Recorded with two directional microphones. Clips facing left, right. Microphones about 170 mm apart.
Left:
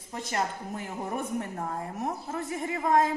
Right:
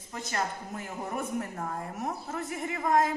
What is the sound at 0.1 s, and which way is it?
A woman's voice, 25° left (ahead or behind).